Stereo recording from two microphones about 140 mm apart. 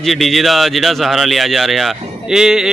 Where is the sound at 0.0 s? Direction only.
Centre (ahead or behind).